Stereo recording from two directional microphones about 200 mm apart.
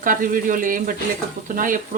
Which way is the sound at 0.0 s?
45° right (ahead or behind).